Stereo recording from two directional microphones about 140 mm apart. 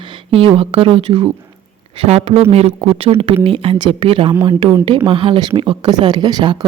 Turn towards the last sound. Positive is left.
turn(degrees=-35)  # may be behind; listen again after turning